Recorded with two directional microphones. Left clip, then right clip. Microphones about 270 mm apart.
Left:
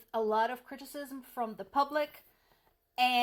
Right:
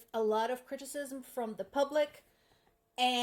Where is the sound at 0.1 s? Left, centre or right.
Centre.